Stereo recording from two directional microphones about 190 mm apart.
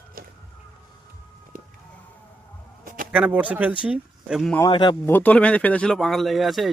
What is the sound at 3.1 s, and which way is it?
Speech, 5° right (ahead or behind).